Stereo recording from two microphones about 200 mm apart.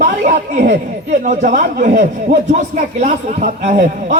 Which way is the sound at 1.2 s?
40° right (ahead or behind).